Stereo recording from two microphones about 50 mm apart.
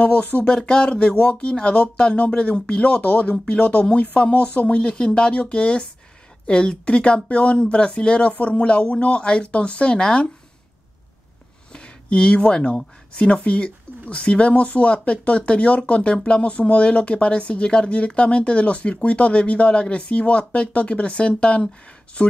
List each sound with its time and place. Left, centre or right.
0.0 s speech: left
0.5 s speech: left
2.9 s speech: left
11.7 s speech: centre